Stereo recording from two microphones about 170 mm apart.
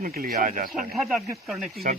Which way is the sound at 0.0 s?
55° right (ahead or behind).